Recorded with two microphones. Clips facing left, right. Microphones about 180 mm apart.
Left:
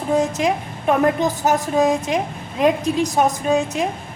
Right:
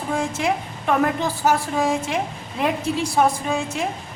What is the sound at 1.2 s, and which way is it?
Speech, 20° left (ahead or behind).